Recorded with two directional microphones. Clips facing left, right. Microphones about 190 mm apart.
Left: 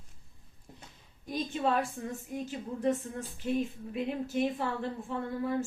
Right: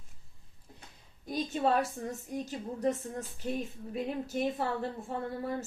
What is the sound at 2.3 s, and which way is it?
Speech, 40° right (ahead or behind).